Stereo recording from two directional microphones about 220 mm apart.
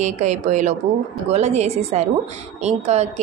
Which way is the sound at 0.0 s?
35° right (ahead or behind).